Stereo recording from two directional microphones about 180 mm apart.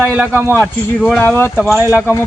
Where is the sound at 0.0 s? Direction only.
10° right (ahead or behind).